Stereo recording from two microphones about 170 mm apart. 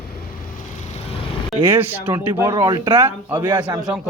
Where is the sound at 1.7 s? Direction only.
10° right (ahead or behind).